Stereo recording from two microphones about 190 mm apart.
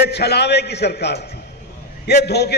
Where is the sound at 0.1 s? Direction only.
60° left (ahead or behind).